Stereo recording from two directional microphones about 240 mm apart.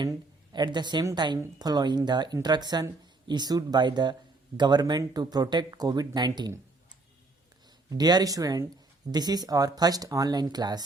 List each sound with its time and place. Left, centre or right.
0.0 s a woman's voice: centre
7.9 s a woman's voice: centre